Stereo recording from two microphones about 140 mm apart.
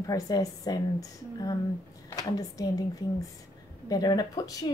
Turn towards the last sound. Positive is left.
turn(degrees=25)  # may be behind; listen again after turning